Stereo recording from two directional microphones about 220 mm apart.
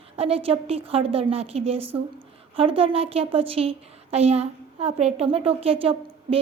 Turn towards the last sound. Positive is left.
turn(degrees=-25)  # may be behind; listen again after turning